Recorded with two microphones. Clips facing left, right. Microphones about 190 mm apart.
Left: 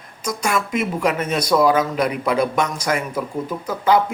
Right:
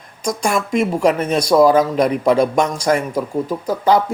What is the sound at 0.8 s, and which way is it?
A man's voice, 35° right (ahead or behind).